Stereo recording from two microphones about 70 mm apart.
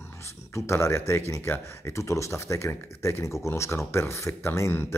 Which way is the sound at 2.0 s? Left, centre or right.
Left.